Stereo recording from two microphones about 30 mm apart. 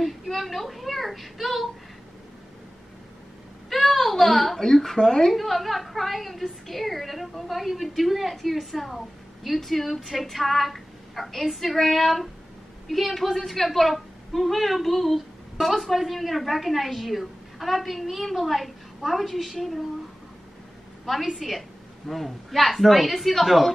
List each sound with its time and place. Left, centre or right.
0.4 s a woman's voice: centre
3.7 s a sound: centre
4.6 s a woman's voice: centre
5.3 s a woman's voice: centre
21.0 s a woman's voice: centre